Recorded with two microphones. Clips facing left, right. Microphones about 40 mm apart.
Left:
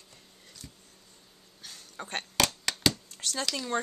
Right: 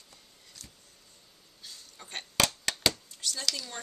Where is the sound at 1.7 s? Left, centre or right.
Left.